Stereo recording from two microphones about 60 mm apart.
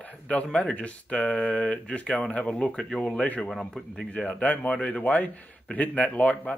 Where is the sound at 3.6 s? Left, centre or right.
Centre.